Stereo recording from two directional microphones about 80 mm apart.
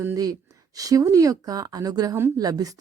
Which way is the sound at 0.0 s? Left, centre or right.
Right.